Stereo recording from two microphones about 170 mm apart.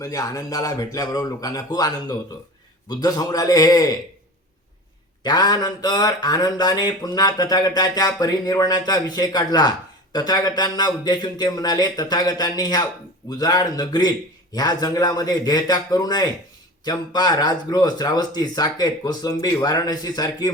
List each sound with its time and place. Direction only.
0.0 s speech: 20° left (ahead or behind)
5.2 s speech: 25° left (ahead or behind)